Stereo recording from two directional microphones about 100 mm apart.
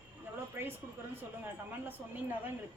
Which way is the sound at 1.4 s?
20° right (ahead or behind).